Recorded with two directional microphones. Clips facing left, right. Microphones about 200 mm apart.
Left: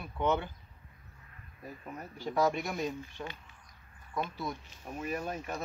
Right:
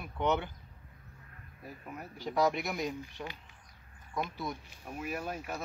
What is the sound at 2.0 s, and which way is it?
Speech, 15° right (ahead or behind).